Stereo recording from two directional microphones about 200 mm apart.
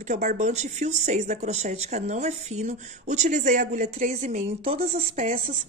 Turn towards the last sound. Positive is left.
turn(degrees=-30)  # may be behind; listen again after turning